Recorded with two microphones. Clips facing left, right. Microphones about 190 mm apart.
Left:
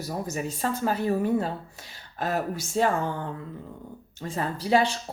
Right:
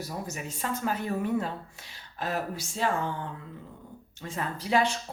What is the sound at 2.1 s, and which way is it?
Speech, 45° left (ahead or behind).